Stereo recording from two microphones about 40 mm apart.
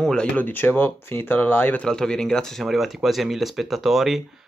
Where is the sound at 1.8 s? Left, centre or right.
Centre.